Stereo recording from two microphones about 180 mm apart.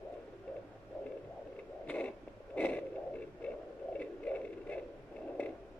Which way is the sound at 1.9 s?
5° left (ahead or behind).